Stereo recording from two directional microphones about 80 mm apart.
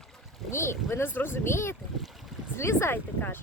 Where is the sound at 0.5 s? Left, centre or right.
Left.